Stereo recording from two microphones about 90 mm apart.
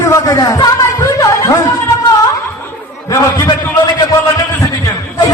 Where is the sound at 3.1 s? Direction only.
40° left (ahead or behind).